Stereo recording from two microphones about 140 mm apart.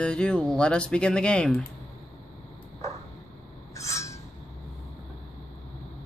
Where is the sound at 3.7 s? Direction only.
20° left (ahead or behind).